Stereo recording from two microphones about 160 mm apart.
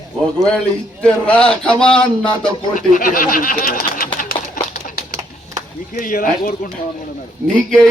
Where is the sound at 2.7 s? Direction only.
60° left (ahead or behind).